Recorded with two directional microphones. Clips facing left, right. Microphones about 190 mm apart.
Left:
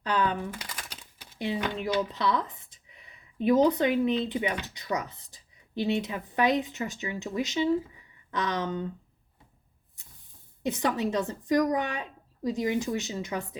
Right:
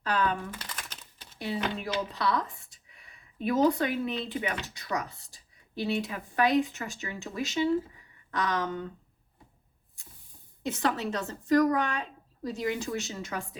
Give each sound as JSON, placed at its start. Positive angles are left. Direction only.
{"t": 0.0, "sound": "a sound", "side_deg": 20}
{"t": 1.4, "sound": "speech", "side_deg": 20}
{"t": 10.0, "sound": "spray", "side_deg": 20}
{"t": 10.7, "sound": "a woman's voice", "side_deg": 15}